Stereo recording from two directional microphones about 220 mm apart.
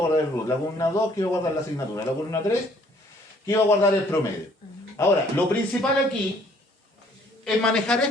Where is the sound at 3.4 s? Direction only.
10° left (ahead or behind).